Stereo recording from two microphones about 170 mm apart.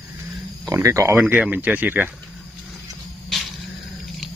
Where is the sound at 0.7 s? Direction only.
20° right (ahead or behind).